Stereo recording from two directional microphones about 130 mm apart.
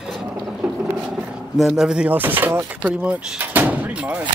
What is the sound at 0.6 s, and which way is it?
Mechanisms, 5° right (ahead or behind).